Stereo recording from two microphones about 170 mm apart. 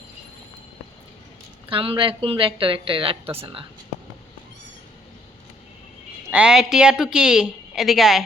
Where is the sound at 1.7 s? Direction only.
30° right (ahead or behind).